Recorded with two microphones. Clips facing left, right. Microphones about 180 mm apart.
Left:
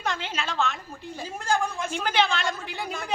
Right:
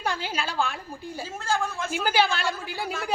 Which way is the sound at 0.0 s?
10° right (ahead or behind).